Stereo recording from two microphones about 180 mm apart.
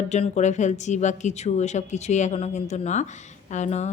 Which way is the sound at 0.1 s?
40° left (ahead or behind).